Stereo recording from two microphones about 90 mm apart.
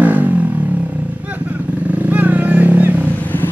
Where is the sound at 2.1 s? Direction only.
20° right (ahead or behind).